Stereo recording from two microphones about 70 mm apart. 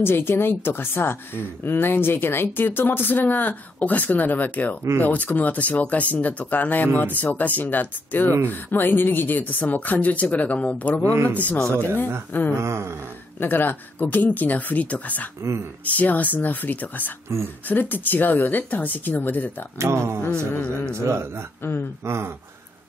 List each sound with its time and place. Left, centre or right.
0.0 s speech: left
12.5 s a sound: right
13.4 s speech: left
19.8 s speech: right